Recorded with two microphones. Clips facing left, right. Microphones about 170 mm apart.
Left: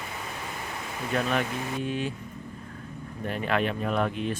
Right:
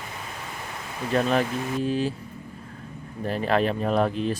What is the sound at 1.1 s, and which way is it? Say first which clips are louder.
Speech: right 5 dB; 35° right (ahead or behind).